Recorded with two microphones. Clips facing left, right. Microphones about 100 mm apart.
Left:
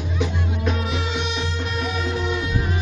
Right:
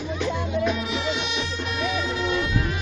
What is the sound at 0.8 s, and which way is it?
Music, 40° left (ahead or behind).